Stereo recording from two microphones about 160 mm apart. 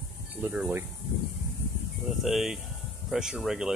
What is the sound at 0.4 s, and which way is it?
Speech, 10° right (ahead or behind).